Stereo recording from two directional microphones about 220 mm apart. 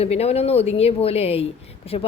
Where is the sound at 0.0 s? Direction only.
30° left (ahead or behind).